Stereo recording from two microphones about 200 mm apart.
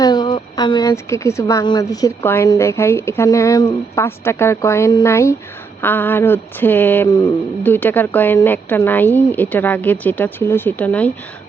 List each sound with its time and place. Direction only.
0.0 s a woman's voice: 20° left (ahead or behind)